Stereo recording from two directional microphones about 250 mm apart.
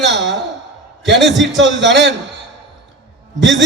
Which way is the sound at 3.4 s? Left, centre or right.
Right.